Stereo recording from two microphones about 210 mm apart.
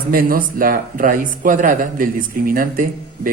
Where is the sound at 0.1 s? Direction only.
45° right (ahead or behind).